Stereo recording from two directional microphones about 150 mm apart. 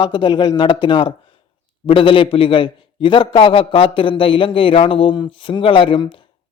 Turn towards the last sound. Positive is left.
turn(degrees=35)  # may be behind; listen again after turning